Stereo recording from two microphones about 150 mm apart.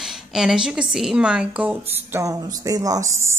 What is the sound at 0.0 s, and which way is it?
A woman's voice, 5° right (ahead or behind).